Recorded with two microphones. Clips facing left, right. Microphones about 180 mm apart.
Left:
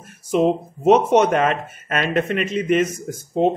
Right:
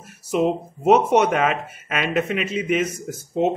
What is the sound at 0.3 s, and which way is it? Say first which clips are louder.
Speech: left 3 dB; 10° right (ahead or behind).